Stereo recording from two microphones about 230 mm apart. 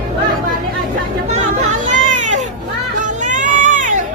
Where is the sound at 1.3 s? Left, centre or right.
Right.